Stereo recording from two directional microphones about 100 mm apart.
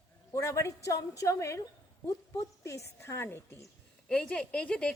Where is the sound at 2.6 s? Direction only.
30° left (ahead or behind).